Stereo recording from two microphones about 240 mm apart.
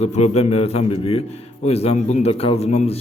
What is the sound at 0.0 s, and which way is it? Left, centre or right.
A man's voice, left.